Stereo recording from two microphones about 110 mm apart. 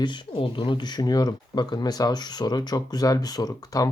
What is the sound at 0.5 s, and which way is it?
Speech, 50° left (ahead or behind).